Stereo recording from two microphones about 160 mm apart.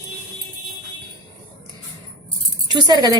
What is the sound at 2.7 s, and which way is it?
Speech, 25° right (ahead or behind).